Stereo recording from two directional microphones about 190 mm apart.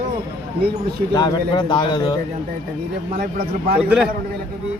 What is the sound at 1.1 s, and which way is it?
Speech, 20° left (ahead or behind).